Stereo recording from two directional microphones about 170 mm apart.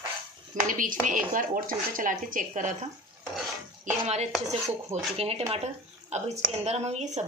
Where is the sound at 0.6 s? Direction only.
50° right (ahead or behind).